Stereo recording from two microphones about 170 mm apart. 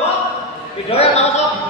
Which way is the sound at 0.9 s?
40° left (ahead or behind).